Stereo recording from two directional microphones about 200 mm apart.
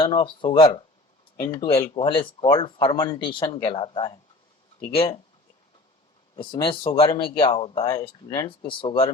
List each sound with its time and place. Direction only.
0.0 s speech: 25° left (ahead or behind)
6.3 s speech: 25° left (ahead or behind)